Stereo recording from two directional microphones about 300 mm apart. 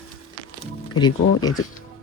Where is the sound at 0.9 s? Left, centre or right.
Centre.